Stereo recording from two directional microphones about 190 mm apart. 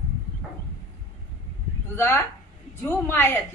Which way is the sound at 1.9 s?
10° left (ahead or behind).